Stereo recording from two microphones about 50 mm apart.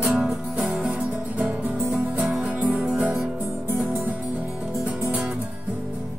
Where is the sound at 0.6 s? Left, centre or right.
Right.